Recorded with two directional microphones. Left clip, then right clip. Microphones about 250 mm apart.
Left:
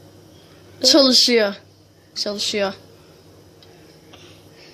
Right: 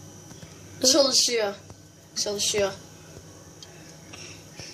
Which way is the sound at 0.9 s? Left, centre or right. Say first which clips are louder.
Left 7 dB; left.